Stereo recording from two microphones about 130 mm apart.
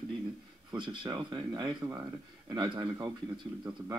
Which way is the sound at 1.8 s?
25° right (ahead or behind).